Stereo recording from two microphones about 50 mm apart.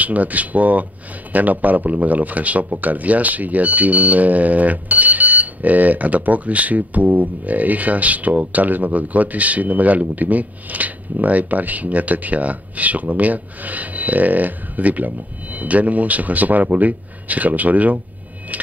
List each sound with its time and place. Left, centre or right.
0.0 s speech: right